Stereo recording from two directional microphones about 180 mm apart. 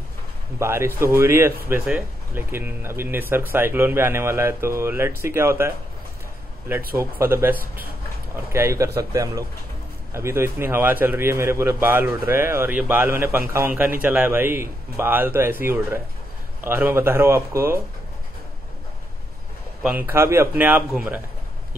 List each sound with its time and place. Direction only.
0.6 s speech: 15° right (ahead or behind)
7.0 s speech: 15° right (ahead or behind)
8.7 s speech: 15° right (ahead or behind)
16.6 s speech: 10° right (ahead or behind)
19.8 s speech: 10° right (ahead or behind)